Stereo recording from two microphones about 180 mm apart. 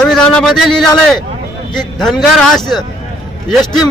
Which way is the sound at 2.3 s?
Centre (ahead or behind).